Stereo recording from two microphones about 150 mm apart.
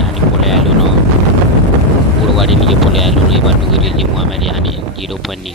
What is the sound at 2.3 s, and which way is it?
Speech, centre (ahead or behind).